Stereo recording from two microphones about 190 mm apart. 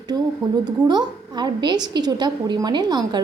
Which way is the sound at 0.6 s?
20° right (ahead or behind).